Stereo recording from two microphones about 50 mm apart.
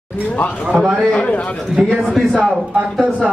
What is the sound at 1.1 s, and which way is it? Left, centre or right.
Speech, left.